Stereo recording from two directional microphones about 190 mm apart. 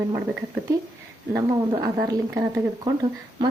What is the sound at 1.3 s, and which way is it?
A woman's voice, 10° right (ahead or behind).